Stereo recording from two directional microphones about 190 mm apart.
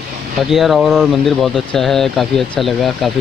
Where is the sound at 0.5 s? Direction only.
Centre (ahead or behind).